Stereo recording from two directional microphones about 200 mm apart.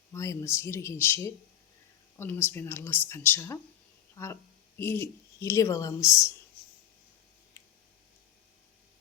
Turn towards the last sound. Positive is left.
turn(degrees=15)  # may be behind; listen again after turning